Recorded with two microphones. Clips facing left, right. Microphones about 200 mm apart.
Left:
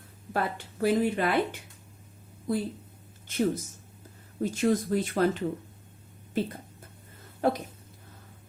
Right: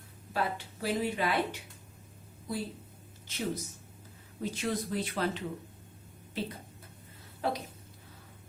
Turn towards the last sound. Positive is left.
turn(degrees=50)  # may be behind; listen again after turning